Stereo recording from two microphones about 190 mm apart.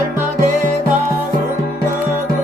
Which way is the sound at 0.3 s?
40° right (ahead or behind).